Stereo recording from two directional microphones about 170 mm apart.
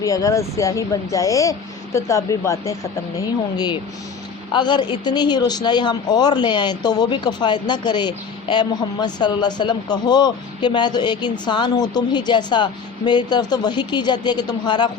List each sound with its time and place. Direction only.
0.0 s speech: 20° left (ahead or behind)
4.5 s speech: 25° left (ahead or behind)